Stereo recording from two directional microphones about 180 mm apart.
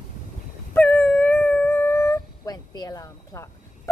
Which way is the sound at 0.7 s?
10° left (ahead or behind).